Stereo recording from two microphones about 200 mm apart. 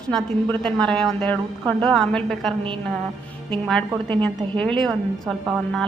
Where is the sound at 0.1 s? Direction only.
5° left (ahead or behind).